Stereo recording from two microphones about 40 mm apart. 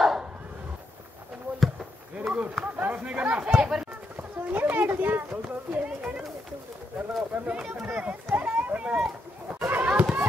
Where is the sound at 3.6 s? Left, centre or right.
Centre.